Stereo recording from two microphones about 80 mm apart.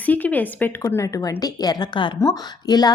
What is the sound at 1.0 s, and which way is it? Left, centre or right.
A woman's voice, left.